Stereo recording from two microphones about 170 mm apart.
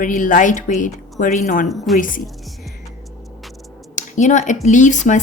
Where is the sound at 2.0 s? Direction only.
50° left (ahead or behind).